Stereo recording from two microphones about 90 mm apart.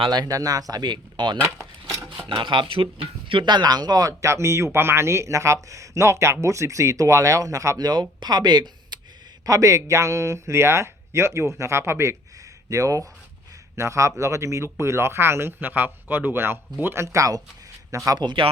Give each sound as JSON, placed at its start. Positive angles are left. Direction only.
{"t": 0.1, "sound": "speech", "side_deg": -45}
{"t": 7.9, "sound": "speech", "side_deg": -50}
{"t": 9.5, "sound": "speech", "side_deg": -35}
{"t": 18.2, "sound": "speech", "side_deg": -70}